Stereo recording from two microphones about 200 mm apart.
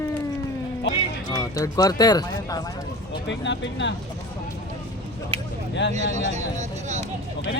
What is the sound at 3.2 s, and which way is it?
Speech, 60° left (ahead or behind).